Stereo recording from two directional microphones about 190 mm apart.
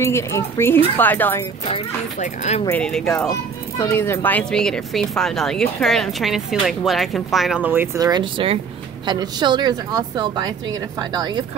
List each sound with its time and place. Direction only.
0.0 s speech: 15° left (ahead or behind)
2.1 s speech: 40° left (ahead or behind)
2.6 s a child's voice: 5° left (ahead or behind)
3.3 s a child's voice: 15° left (ahead or behind); by 11.4 s 20° right (ahead or behind)